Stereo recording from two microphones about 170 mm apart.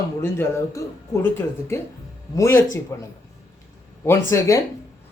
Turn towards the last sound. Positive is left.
turn(degrees=15)  # may be behind; listen again after turning